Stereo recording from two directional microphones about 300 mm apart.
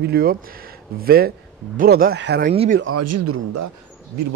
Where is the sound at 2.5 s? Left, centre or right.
Centre.